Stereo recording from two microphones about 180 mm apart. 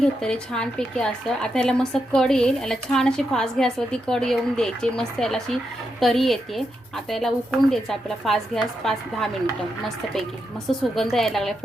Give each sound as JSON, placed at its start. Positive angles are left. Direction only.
{"t": 0.0, "sound": "speech", "side_deg": 5}
{"t": 10.7, "sound": "speech", "side_deg": 0}